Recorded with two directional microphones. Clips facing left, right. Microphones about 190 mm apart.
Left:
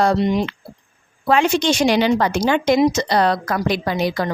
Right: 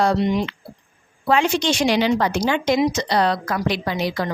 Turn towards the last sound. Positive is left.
turn(degrees=45)  # may be behind; listen again after turning